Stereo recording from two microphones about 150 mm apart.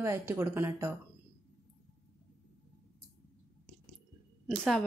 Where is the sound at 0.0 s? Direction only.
20° right (ahead or behind).